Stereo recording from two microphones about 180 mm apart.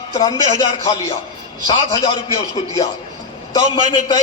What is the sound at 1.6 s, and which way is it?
Speech, 25° left (ahead or behind).